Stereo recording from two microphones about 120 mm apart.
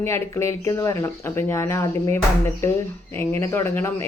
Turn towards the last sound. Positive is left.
turn(degrees=20)  # may be behind; listen again after turning